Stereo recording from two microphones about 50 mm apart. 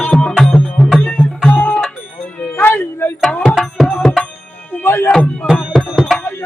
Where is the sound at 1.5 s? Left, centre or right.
Left.